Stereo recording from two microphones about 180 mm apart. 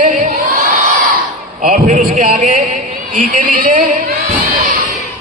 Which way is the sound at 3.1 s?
50° right (ahead or behind).